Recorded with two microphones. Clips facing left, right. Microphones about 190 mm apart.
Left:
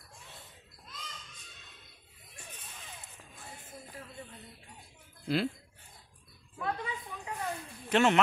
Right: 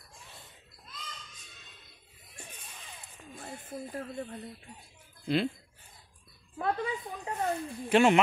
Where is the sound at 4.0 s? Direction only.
60° right (ahead or behind).